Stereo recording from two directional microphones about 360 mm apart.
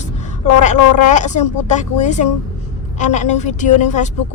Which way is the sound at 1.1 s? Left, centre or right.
Centre.